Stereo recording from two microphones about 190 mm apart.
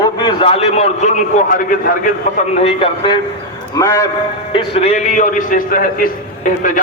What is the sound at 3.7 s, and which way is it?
Speech, 20° left (ahead or behind).